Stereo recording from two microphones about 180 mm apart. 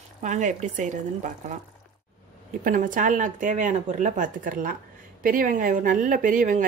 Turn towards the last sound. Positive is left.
turn(degrees=-45)  # may be behind; listen again after turning